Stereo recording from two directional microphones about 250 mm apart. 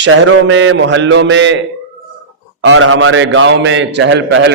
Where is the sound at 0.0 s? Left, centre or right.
Right.